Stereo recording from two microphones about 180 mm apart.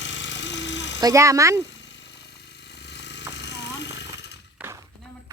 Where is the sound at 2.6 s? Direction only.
70° left (ahead or behind).